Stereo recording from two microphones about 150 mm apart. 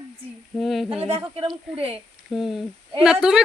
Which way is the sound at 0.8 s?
40° right (ahead or behind).